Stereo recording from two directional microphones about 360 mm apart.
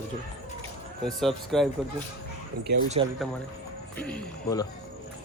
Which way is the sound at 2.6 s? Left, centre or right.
Centre.